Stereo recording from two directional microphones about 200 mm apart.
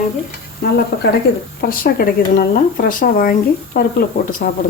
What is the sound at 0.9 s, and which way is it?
Speech, 55° left (ahead or behind).